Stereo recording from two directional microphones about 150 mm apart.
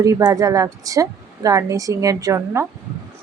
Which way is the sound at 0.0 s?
20° right (ahead or behind).